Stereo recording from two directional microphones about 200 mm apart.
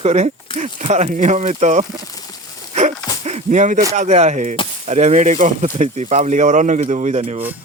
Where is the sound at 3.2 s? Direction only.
35° right (ahead or behind).